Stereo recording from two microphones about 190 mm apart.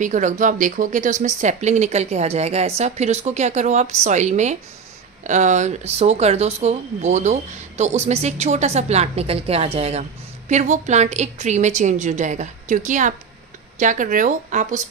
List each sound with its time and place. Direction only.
0.0 s speech: 40° right (ahead or behind)